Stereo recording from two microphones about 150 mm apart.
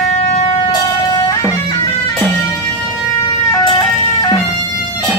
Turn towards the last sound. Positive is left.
turn(degrees=25)  # may be behind; listen again after turning